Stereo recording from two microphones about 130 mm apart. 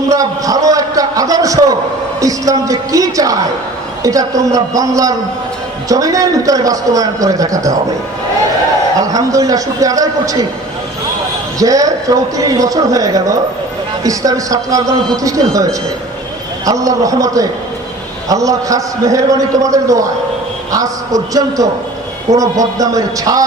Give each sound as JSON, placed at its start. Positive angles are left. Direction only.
{"t": 0.1, "sound": "a sound", "side_deg": -25}
{"t": 2.2, "sound": "a man's voice", "side_deg": -25}
{"t": 9.0, "sound": "a man's voice", "side_deg": -25}
{"t": 11.6, "sound": "a man's voice", "side_deg": -25}
{"t": 16.6, "sound": "a man's voice", "side_deg": -25}